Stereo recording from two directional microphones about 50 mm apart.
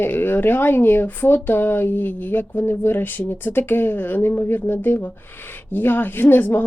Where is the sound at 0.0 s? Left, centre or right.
Left.